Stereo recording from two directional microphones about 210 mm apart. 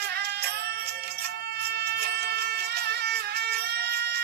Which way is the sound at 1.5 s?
50° right (ahead or behind).